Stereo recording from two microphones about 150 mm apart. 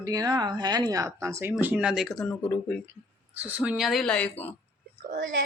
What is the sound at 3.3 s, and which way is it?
Speech, 10° right (ahead or behind).